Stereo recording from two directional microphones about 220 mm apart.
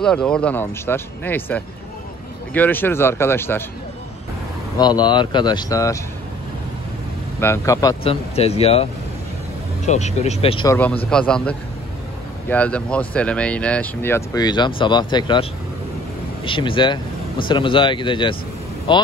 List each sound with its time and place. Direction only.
0.0 s speech: 5° left (ahead or behind)
4.7 s speech: 20° left (ahead or behind)
7.3 s speech: 10° left (ahead or behind); by 8.8 s 25° left (ahead or behind)
9.8 s speech: 30° left (ahead or behind)
10.7 s speech: 5° left (ahead or behind)
16.4 s speech: 25° left (ahead or behind)